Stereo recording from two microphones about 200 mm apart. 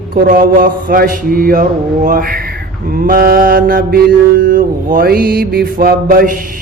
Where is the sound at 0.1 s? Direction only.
45° right (ahead or behind).